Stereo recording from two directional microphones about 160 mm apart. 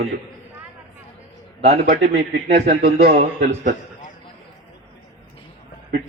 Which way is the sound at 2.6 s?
75° right (ahead or behind).